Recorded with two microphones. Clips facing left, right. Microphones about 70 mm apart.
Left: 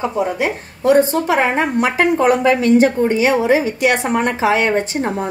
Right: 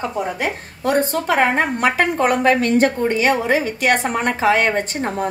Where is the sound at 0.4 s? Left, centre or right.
Right.